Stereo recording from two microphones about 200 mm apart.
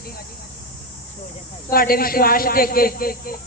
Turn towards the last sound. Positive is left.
turn(degrees=45)  # may be behind; listen again after turning